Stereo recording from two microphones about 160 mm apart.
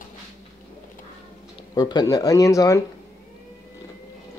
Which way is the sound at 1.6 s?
25° left (ahead or behind).